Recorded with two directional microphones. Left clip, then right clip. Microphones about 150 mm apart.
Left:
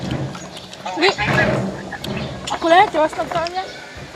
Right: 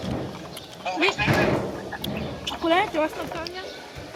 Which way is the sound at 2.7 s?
70° right (ahead or behind).